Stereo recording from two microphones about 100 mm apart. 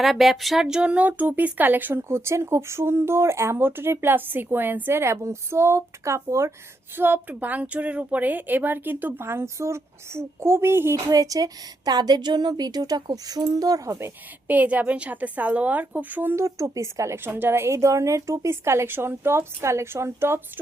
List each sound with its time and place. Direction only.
0.0 s speech: centre (ahead or behind); by 10.9 s 25° right (ahead or behind)
10.9 s a woman's voice: 35° right (ahead or behind)
14.4 s speech: 15° right (ahead or behind)